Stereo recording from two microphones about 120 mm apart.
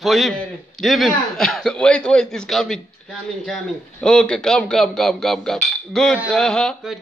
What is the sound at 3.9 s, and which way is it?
Speech, 5° left (ahead or behind).